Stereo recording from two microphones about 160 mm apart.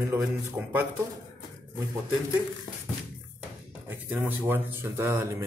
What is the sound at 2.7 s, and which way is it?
Beatboxing, 35° left (ahead or behind).